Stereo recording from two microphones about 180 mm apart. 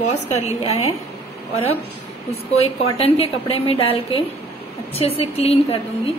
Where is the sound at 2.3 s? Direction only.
35° left (ahead or behind).